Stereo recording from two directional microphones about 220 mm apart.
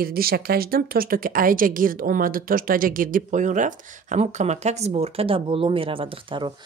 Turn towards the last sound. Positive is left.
turn(degrees=-25)  # may be behind; listen again after turning